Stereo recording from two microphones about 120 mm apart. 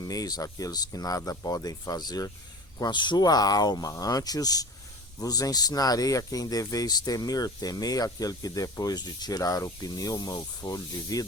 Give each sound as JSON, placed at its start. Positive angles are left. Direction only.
{"t": 0.0, "sound": "speech", "side_deg": 30}